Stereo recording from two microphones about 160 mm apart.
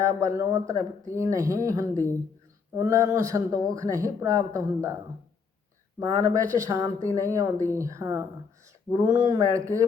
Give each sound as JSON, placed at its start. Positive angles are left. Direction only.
{"t": 0.0, "sound": "speech", "side_deg": -20}
{"t": 6.0, "sound": "speech", "side_deg": -20}